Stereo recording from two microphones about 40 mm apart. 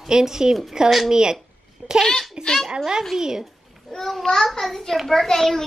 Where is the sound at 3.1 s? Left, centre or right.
Centre.